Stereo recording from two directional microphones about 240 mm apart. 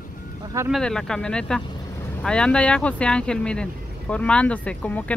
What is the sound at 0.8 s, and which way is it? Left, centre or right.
Speech, centre.